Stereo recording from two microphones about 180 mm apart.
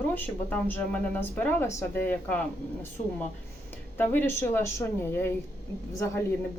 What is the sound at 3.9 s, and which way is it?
Speech, 10° left (ahead or behind).